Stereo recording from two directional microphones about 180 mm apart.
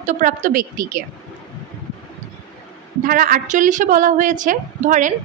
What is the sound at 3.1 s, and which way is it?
A woman's voice, 50° right (ahead or behind).